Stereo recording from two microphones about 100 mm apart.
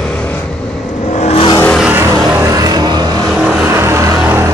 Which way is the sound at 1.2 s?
70° left (ahead or behind).